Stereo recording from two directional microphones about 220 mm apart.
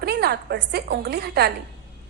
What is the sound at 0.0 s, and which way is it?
A woman's voice, 45° right (ahead or behind).